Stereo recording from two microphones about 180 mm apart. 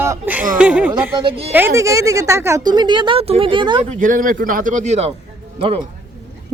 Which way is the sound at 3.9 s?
50° right (ahead or behind).